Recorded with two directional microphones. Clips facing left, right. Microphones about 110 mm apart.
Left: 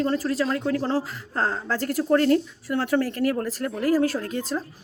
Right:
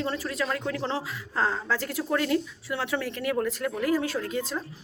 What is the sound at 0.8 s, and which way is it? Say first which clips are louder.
A woman's voice: left 5 dB; 40° left (ahead or behind).